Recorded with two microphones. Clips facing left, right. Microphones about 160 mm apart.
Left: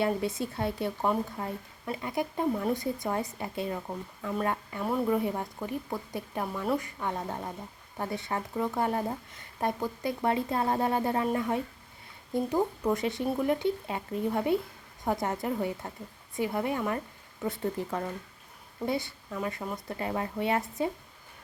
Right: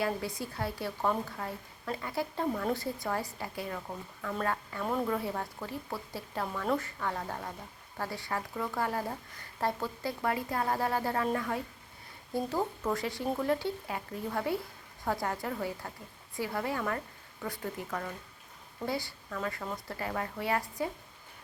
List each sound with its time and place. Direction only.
0.0 s speech: 25° left (ahead or behind)